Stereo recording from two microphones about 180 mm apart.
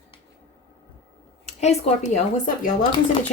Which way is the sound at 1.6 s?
35° left (ahead or behind).